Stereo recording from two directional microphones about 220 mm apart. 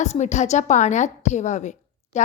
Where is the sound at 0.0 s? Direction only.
30° left (ahead or behind).